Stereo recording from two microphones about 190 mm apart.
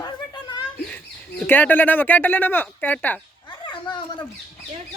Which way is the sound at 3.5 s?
25° left (ahead or behind).